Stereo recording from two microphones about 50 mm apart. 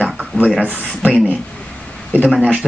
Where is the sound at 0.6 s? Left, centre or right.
Right.